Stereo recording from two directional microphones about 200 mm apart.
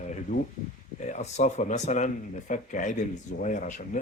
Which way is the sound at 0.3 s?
40° left (ahead or behind).